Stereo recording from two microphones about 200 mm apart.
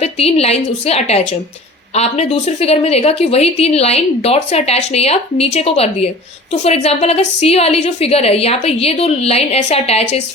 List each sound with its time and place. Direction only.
0.0 s a woman's voice: 30° left (ahead or behind)